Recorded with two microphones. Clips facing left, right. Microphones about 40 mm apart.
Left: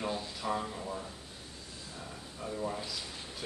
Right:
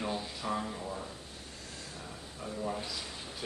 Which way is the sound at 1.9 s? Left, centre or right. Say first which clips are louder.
Even; centre.